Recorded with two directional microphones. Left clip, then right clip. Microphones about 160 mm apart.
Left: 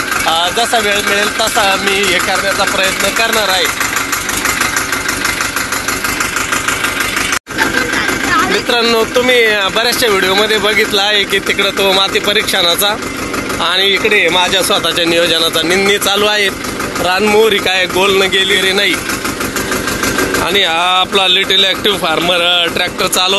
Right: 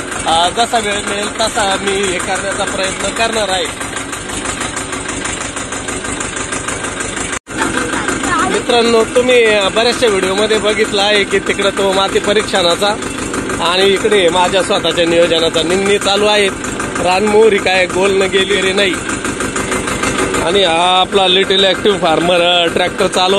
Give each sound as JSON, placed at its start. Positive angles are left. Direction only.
{"t": 0.3, "sound": "speech", "side_deg": 20}
{"t": 8.6, "sound": "speech", "side_deg": 0}
{"t": 20.4, "sound": "speech", "side_deg": -10}